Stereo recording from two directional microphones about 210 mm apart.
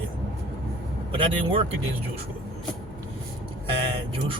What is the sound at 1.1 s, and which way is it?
Speech, 25° right (ahead or behind).